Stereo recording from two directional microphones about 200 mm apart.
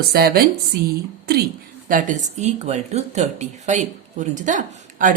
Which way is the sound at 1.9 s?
40° right (ahead or behind).